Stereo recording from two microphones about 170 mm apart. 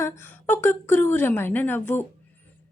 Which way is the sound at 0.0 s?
15° left (ahead or behind).